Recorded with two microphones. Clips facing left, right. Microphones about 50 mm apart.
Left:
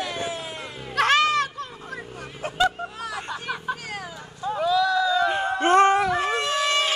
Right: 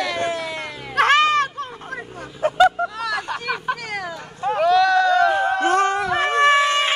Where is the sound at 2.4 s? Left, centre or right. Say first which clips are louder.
Right 8 dB; right.